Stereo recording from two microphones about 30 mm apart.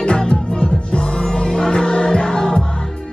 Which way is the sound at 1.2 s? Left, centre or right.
Left.